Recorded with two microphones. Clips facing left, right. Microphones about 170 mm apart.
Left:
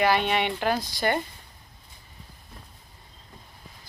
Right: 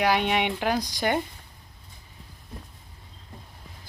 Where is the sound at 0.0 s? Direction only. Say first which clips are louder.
Even; 10° right (ahead or behind).